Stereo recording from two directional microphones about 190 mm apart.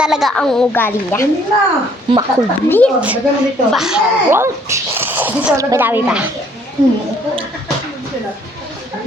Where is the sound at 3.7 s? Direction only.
5° right (ahead or behind).